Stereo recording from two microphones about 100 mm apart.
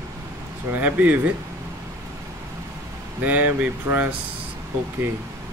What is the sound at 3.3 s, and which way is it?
Speech, 15° right (ahead or behind).